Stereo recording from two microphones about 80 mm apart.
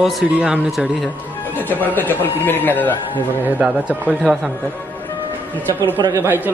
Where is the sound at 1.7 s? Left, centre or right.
Left.